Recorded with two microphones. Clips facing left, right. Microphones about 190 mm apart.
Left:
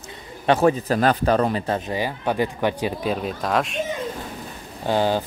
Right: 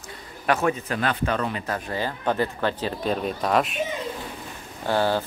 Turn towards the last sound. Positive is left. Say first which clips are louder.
# left 2 dB
turn(degrees=15)  # may be behind; listen again after turning